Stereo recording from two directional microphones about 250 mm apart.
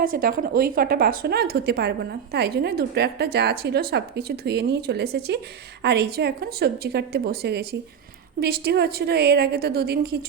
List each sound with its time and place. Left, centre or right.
0.0 s a woman's voice: right